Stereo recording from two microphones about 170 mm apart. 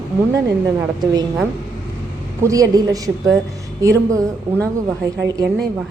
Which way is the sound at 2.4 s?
20° right (ahead or behind).